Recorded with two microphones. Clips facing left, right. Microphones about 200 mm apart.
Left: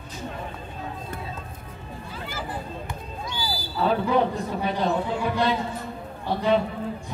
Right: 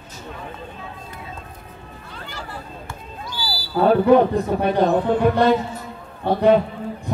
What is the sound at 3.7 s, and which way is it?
Speech, 55° right (ahead or behind).